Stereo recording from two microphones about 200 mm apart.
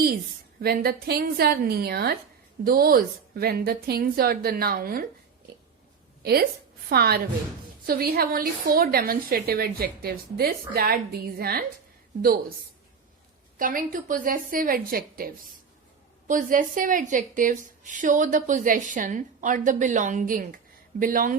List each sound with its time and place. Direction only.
0.6 s a woman's voice: 50° right (ahead or behind)
6.2 s a woman's voice: 50° right (ahead or behind)
13.6 s a woman's voice: 45° right (ahead or behind)